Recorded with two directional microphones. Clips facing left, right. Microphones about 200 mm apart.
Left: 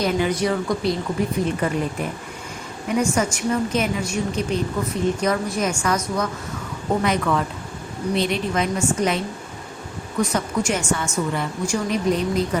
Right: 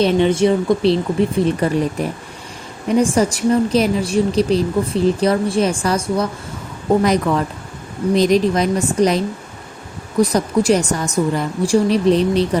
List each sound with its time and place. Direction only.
0.0 s a woman's voice: 25° right (ahead or behind)